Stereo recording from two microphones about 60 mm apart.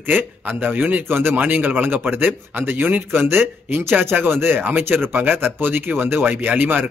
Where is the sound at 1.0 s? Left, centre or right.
Right.